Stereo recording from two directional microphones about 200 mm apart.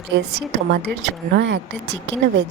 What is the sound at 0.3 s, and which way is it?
A woman's voice, 55° right (ahead or behind).